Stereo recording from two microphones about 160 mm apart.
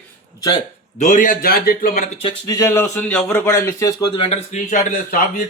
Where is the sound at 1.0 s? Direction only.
50° left (ahead or behind); by 1.9 s 70° left (ahead or behind).